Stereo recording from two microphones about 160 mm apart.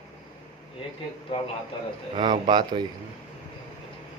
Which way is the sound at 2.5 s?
30° right (ahead or behind).